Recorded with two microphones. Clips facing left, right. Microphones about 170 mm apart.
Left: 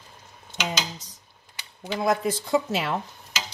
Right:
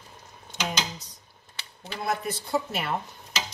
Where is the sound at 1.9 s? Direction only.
90° left.